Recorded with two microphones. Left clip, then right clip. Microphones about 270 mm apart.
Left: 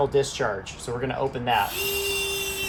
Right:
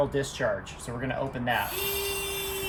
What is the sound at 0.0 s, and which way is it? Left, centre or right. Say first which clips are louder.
Speech: left 5 dB; left.